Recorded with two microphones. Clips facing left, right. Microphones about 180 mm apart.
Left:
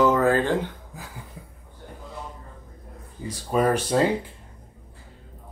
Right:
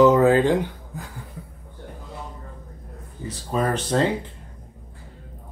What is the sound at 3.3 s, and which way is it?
Speech, 10° left (ahead or behind).